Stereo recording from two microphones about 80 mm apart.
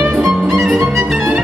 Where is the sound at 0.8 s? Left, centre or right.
Right.